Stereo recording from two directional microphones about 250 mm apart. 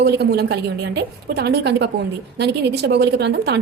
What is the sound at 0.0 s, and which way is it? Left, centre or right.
A woman's voice, right.